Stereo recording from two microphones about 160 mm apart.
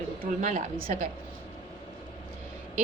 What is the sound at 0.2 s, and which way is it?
Speech, 50° right (ahead or behind).